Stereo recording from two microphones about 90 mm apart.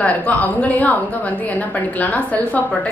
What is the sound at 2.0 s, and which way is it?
Speech, 15° left (ahead or behind).